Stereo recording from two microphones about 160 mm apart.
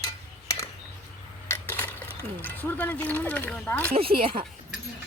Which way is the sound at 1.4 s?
15° left (ahead or behind).